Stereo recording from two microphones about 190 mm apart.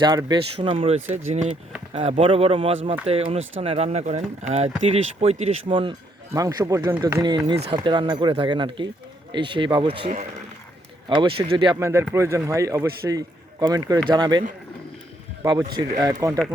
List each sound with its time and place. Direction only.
0.0 s speech: 20° right (ahead or behind)
11.7 s a man's voice: 15° right (ahead or behind)
15.4 s speech: 20° right (ahead or behind)